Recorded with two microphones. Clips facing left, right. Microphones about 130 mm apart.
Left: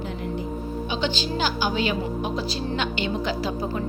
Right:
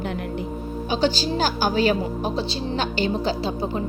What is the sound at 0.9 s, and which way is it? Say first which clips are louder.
A woman's voice: right 6 dB; 40° right (ahead or behind).